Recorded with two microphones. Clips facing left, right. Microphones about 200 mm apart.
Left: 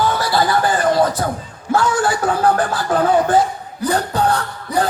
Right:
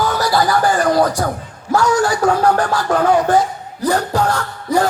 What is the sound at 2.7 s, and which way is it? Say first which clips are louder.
Music: right 1 dB; 30° left (ahead or behind).